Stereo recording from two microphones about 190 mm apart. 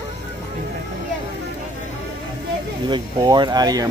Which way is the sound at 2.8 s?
25° right (ahead or behind).